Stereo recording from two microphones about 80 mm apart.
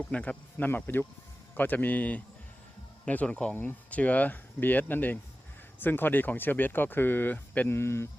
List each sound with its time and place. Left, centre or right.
0.0 s speech: centre
7.7 s speech: left